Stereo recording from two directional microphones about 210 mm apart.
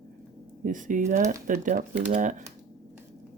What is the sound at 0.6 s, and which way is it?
Speech, 40° right (ahead or behind).